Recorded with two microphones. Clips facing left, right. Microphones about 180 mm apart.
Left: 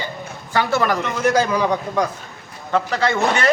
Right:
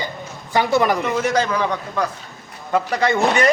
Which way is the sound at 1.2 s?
Centre (ahead or behind).